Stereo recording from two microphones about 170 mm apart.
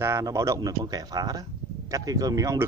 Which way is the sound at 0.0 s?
15° right (ahead or behind).